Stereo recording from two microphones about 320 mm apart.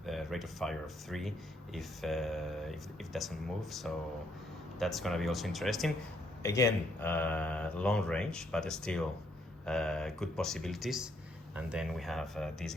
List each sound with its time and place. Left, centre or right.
0.0 s speech: centre